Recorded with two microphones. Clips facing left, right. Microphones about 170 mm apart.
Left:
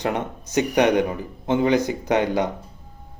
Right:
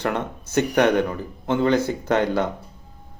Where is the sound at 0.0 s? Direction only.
15° left (ahead or behind).